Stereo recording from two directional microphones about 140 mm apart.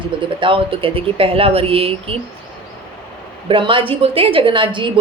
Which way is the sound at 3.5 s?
35° right (ahead or behind).